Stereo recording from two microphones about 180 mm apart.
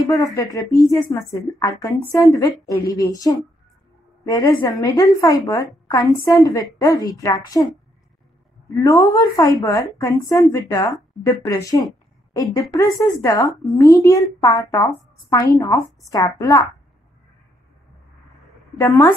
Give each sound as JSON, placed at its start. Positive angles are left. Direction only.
{"t": 0.0, "sound": "a woman's voice", "side_deg": 20}
{"t": 8.7, "sound": "a woman's voice", "side_deg": 20}
{"t": 18.8, "sound": "a woman's voice", "side_deg": 15}